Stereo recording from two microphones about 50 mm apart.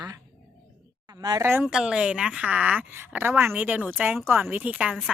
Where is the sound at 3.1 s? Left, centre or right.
Right.